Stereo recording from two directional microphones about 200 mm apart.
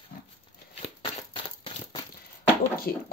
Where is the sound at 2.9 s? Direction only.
50° left (ahead or behind).